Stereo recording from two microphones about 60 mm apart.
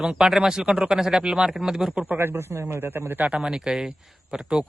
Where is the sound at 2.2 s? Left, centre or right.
Right.